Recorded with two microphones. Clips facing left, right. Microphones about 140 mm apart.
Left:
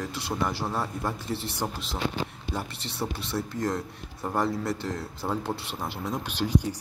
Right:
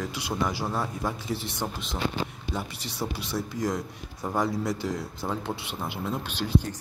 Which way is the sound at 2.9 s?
Centre (ahead or behind).